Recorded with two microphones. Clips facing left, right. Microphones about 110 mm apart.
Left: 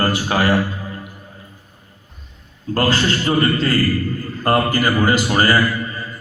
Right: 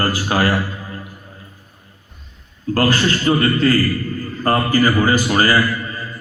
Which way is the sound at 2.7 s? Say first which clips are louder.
Right 1 dB; 25° left (ahead or behind).